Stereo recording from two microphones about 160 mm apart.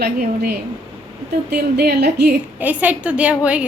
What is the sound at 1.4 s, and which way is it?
Speech, 85° right.